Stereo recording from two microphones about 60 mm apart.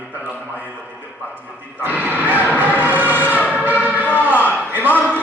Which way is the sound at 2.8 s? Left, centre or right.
Right.